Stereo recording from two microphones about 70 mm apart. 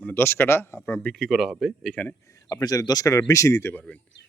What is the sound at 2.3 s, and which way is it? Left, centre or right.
Speech, left.